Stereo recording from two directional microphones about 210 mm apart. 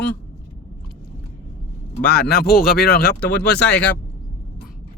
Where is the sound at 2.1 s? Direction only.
50° left (ahead or behind).